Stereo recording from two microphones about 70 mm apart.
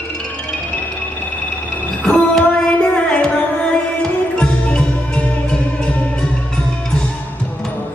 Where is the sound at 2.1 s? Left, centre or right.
Centre.